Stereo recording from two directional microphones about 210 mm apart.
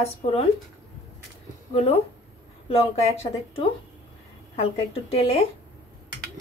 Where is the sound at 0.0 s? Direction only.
25° left (ahead or behind).